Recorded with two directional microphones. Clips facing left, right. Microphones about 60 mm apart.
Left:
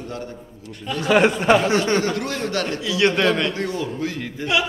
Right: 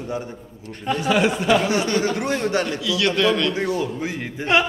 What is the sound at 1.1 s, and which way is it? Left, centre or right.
Speech, left.